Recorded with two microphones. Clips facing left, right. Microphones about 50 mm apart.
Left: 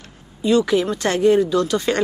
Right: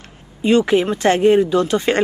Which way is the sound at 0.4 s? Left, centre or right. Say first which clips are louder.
Right 2 dB; right.